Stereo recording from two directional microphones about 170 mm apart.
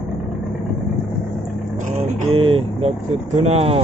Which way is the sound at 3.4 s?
35° right (ahead or behind).